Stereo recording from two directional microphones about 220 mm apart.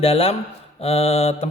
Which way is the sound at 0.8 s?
25° left (ahead or behind).